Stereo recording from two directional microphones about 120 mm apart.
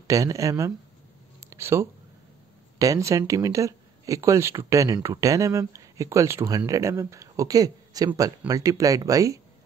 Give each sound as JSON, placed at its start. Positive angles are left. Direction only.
{"t": 0.0, "sound": "speech", "side_deg": -30}
{"t": 1.4, "sound": "a sound", "side_deg": -20}
{"t": 2.8, "sound": "speech", "side_deg": -25}